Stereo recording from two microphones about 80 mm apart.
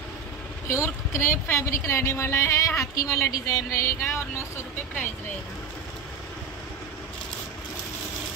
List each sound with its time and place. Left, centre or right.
0.7 s speech: left